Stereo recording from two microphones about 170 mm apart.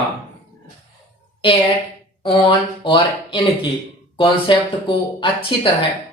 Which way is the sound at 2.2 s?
30° left (ahead or behind).